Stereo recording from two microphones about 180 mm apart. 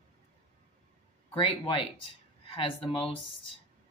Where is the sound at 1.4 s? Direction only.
30° left (ahead or behind).